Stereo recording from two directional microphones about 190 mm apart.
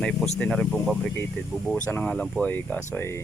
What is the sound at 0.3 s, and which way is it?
Speech, 5° left (ahead or behind).